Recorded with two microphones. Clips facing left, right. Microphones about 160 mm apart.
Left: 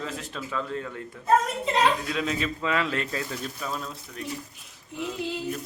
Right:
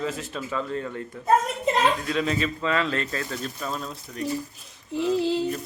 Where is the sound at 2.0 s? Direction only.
Centre (ahead or behind).